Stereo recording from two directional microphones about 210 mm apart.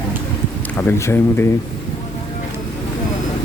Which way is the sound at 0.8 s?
15° left (ahead or behind).